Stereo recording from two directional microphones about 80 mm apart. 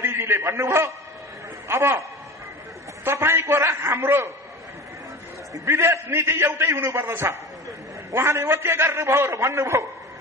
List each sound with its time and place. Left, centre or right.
0.0 s a man's voice: right
5.7 s a man's voice: right